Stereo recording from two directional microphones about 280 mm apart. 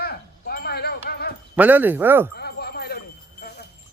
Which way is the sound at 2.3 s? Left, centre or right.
Left.